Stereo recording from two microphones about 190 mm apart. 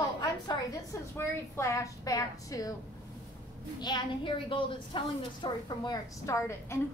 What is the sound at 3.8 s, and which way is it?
A woman's voice, 25° left (ahead or behind).